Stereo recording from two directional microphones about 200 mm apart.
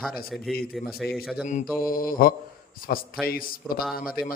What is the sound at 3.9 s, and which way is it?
Mantra, 45° left (ahead or behind).